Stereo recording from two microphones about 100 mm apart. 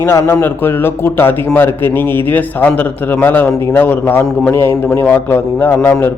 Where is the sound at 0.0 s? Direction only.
25° left (ahead or behind).